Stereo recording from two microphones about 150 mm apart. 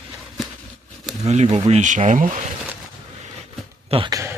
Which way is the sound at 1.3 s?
45° right (ahead or behind).